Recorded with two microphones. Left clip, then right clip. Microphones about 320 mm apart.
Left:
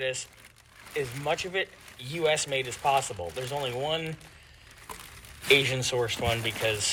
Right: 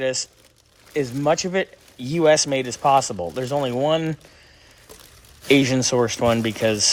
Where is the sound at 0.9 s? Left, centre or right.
Right.